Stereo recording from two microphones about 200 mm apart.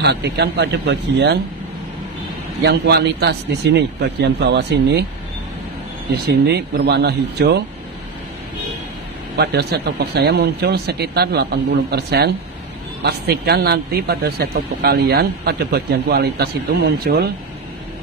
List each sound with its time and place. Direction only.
0.0 s speech: 55° right (ahead or behind)
2.6 s speech: 55° right (ahead or behind)
6.1 s speech: 55° right (ahead or behind)
9.4 s speech: 55° right (ahead or behind)